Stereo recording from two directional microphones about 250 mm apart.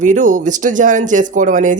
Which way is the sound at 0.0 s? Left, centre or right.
Right.